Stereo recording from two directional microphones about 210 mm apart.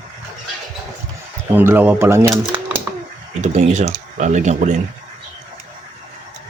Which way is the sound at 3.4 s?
35° right (ahead or behind).